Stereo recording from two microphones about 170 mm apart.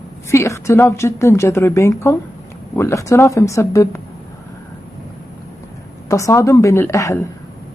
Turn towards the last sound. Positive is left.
turn(degrees=15)  # may be behind; listen again after turning